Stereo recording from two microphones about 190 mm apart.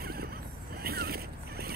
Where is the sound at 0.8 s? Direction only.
55° right (ahead or behind).